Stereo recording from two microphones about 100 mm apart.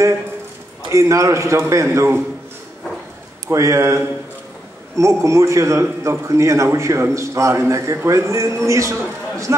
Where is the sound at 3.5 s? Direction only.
30° right (ahead or behind).